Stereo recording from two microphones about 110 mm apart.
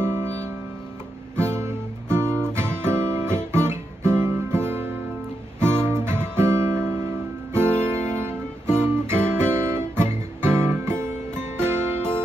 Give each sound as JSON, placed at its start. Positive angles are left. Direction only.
{"t": 1.4, "sound": "guitar", "side_deg": -20}
{"t": 5.6, "sound": "music", "side_deg": -20}
{"t": 8.2, "sound": "guitar", "side_deg": -20}
{"t": 11.5, "sound": "music", "side_deg": -20}